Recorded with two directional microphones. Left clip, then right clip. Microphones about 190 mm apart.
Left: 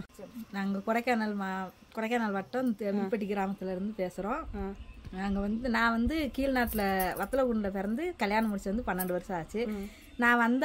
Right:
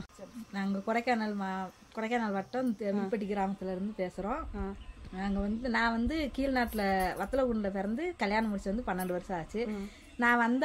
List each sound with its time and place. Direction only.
0.5 s speech: 5° left (ahead or behind)